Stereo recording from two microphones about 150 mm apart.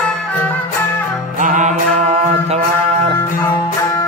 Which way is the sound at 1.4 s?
60° right (ahead or behind).